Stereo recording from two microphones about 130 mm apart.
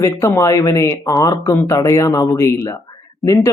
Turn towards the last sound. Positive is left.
turn(degrees=25)  # may be behind; listen again after turning